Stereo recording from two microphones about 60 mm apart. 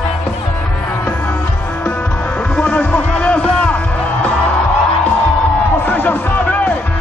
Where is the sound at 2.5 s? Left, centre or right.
Centre.